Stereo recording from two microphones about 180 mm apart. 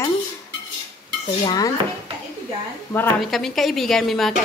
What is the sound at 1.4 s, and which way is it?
Dishes, 25° left (ahead or behind).